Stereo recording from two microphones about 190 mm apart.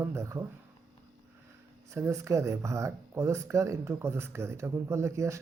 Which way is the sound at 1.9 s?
15° right (ahead or behind).